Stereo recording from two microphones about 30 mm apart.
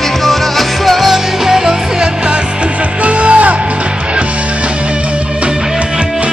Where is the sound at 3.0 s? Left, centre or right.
Right.